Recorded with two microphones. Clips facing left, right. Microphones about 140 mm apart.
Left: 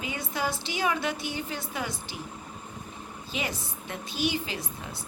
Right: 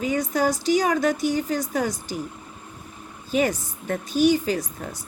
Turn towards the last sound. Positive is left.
turn(degrees=-45)  # may be behind; listen again after turning